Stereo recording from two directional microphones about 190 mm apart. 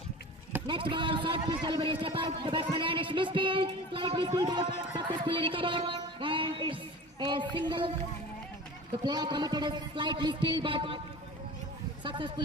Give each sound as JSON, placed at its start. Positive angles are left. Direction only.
{"t": 0.7, "sound": "a man's voice", "side_deg": -25}
{"t": 9.0, "sound": "a man's voice", "side_deg": -20}
{"t": 12.0, "sound": "a sound", "side_deg": -25}